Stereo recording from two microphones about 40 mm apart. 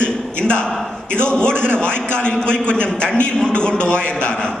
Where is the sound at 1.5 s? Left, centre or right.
Right.